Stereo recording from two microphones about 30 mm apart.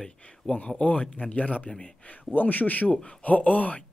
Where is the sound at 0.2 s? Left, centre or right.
Left.